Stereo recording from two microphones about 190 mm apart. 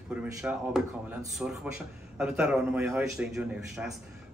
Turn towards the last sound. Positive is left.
turn(degrees=-5)  # may be behind; listen again after turning